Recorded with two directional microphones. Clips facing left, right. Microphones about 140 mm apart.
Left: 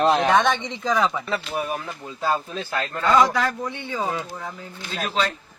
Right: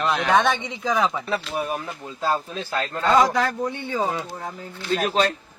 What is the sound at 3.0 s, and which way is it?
Speech, 35° right (ahead or behind).